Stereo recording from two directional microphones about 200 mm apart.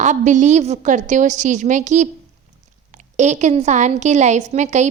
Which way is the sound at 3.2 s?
35° right (ahead or behind).